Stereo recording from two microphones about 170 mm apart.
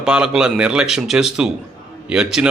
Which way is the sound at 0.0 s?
5° right (ahead or behind).